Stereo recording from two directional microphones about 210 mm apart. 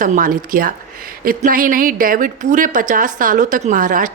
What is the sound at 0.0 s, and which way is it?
A woman's voice, 40° right (ahead or behind).